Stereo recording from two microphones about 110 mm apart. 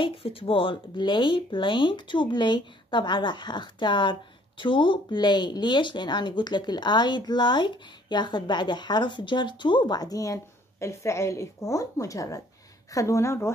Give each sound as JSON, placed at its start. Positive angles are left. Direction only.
{"t": 0.0, "sound": "speech", "side_deg": 55}